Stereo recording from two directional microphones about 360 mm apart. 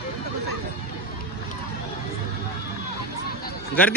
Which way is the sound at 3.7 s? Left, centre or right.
Centre.